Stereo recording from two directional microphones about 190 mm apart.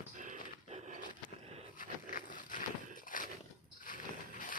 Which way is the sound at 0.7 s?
35° right (ahead or behind).